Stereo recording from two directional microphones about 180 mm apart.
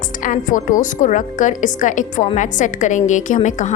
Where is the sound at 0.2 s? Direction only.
45° left (ahead or behind).